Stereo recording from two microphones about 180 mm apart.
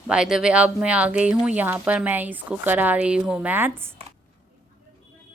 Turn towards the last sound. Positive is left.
turn(degrees=-10)  # may be behind; listen again after turning